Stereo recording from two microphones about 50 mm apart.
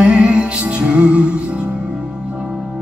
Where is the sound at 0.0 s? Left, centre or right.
Right.